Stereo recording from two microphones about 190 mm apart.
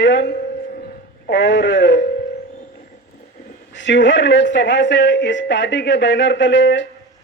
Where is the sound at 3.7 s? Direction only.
70° left (ahead or behind).